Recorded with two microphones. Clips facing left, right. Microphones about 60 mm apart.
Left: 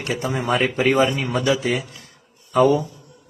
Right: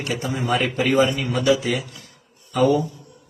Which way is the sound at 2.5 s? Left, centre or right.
Left.